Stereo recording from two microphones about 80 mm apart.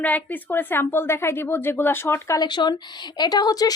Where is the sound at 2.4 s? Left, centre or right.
Left.